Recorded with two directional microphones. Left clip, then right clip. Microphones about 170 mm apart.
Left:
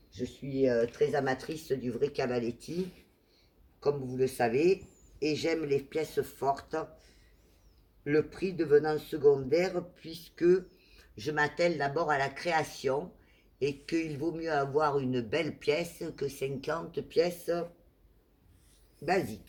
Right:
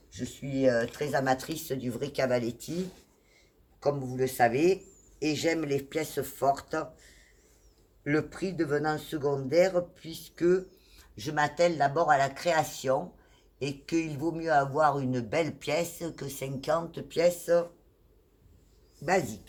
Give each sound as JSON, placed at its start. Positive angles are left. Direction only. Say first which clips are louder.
{"t": 0.9, "sound": "speech", "louder": "right 1 dB", "side_deg": -35}
{"t": 3.8, "sound": "speech", "louder": "right 1 dB", "side_deg": -35}
{"t": 19.0, "sound": "speech", "louder": "right 3 dB", "side_deg": -20}